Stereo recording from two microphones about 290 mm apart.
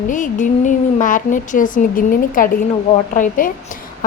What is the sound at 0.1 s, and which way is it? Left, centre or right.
A woman's voice, left.